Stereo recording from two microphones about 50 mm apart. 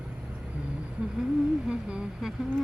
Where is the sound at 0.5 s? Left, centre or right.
Right.